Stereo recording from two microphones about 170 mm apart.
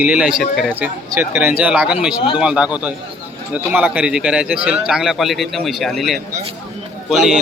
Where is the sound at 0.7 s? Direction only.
10° right (ahead or behind).